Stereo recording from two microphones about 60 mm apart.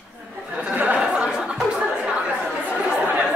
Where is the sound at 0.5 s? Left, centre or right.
Right.